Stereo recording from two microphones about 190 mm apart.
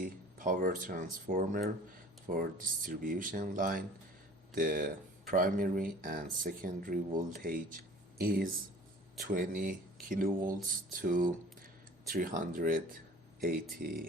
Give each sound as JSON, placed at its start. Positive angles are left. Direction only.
{"t": 0.0, "sound": "speech", "side_deg": -45}